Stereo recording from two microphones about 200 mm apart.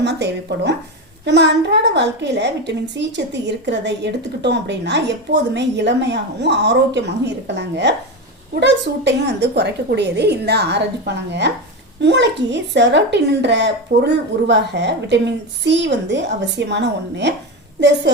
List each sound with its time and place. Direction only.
0.0 s a child's voice: 60° right (ahead or behind)